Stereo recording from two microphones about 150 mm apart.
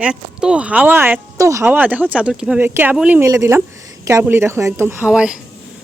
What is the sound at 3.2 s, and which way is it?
Speech, 20° right (ahead or behind).